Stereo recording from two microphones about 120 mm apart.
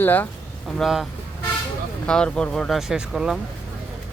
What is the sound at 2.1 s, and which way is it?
Speech, 5° left (ahead or behind).